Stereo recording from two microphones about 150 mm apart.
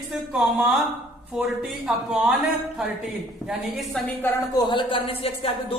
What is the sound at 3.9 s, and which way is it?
Speech, 10° left (ahead or behind).